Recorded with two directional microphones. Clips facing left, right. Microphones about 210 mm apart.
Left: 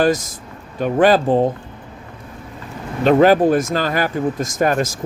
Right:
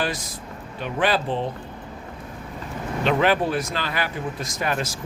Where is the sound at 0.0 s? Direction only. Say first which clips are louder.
Left 11 dB; 45° left (ahead or behind).